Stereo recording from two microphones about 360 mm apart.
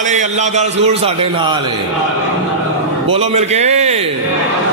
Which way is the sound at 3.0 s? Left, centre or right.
Centre.